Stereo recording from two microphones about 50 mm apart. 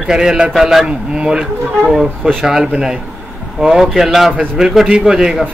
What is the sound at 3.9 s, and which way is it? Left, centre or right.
A man's voice, centre.